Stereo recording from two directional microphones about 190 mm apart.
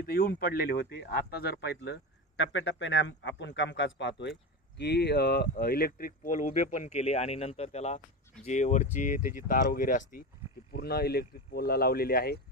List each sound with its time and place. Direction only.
0.0 s speech: 50° left (ahead or behind)
10.7 s speech: 55° left (ahead or behind)